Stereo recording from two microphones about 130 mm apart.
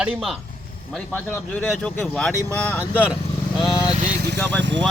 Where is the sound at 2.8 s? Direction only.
10° right (ahead or behind).